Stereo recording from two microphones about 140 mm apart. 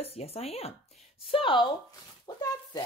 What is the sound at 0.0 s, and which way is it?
Speech, 45° left (ahead or behind).